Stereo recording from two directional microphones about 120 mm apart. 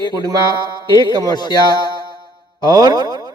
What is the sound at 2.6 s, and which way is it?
Boing, 30° right (ahead or behind).